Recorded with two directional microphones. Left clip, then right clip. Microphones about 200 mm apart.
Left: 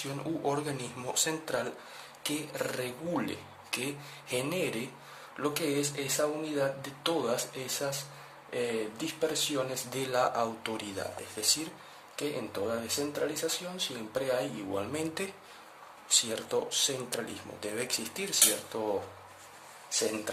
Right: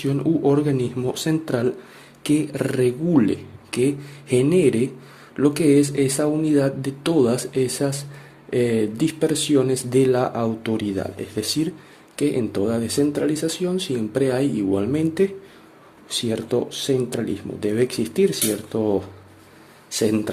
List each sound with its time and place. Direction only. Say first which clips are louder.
0.0 s speech: right 13 dB; 30° right (ahead or behind)
19.9 s speech: right 10 dB; 40° right (ahead or behind)